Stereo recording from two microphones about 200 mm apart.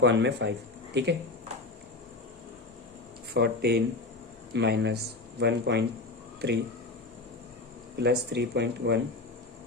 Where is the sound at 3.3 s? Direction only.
55° right (ahead or behind).